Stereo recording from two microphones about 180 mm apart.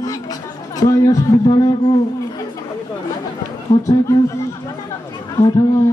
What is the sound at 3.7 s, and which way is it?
Speech, 20° left (ahead or behind).